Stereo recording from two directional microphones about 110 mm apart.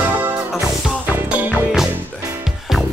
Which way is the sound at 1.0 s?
15° right (ahead or behind).